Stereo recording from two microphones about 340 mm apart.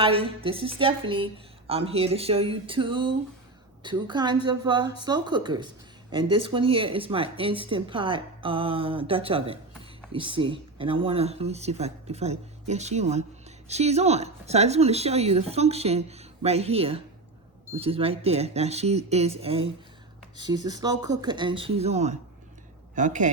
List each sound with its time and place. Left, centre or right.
0.0 s speech: centre